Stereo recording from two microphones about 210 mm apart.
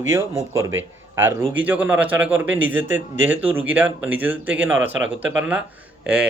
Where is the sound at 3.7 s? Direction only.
10° right (ahead or behind).